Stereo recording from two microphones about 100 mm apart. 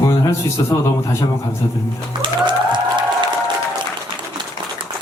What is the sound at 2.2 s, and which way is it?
Music, 50° right (ahead or behind).